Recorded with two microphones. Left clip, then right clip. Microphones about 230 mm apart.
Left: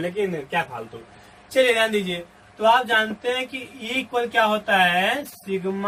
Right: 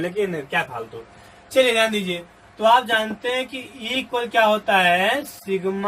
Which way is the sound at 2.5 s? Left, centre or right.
Centre.